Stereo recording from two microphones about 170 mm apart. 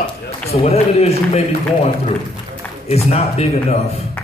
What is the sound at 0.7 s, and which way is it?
A man's voice, 40° left (ahead or behind).